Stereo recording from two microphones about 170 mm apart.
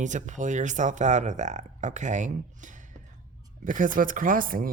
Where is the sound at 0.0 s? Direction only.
45° right (ahead or behind).